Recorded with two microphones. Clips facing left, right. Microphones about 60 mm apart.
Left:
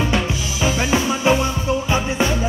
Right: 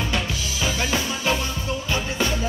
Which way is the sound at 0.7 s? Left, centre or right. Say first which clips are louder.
Left 6 dB; left.